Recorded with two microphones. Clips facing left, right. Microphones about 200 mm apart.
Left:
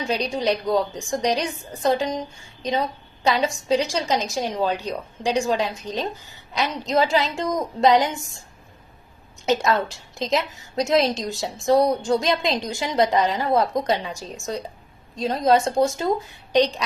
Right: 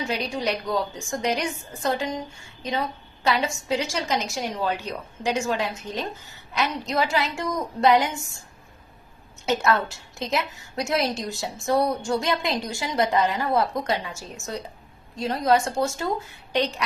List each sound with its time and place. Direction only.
0.1 s a woman's voice: 20° left (ahead or behind)
3.2 s a woman's voice: 15° left (ahead or behind)
9.5 s a woman's voice: 20° left (ahead or behind)